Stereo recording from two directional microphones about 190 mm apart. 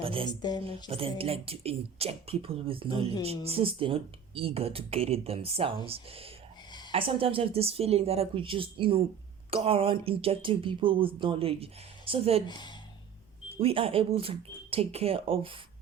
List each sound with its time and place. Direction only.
0.0 s speech: 30° right (ahead or behind)
0.3 s speech: 20° left (ahead or behind)
0.6 s speech: 30° right (ahead or behind)
12.5 s speech: 25° left (ahead or behind)
13.6 s speech: 30° right (ahead or behind)